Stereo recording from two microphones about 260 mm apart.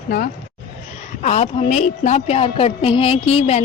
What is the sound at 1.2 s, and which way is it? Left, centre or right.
Music, left.